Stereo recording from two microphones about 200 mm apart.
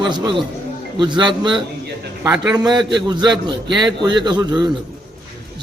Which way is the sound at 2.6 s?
20° right (ahead or behind).